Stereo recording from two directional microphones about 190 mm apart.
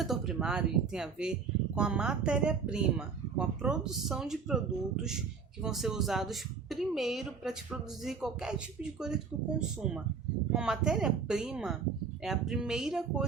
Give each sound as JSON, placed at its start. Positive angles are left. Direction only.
{"t": 0.0, "sound": "a woman's voice", "side_deg": 0}
{"t": 5.6, "sound": "a woman's voice", "side_deg": 0}